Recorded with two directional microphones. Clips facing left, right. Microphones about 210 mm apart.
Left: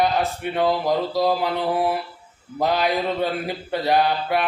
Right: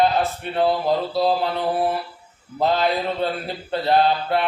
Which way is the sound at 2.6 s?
15° left (ahead or behind).